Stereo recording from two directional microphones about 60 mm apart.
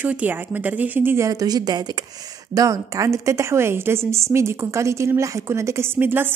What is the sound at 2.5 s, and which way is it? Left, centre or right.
A woman's voice, right.